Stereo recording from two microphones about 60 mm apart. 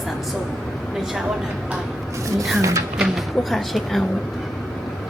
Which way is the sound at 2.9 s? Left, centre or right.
Centre.